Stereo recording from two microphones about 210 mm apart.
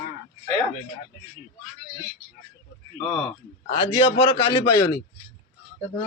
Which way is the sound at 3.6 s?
30° left (ahead or behind).